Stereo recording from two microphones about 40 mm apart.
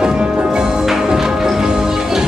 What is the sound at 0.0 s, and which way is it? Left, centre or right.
Music, centre.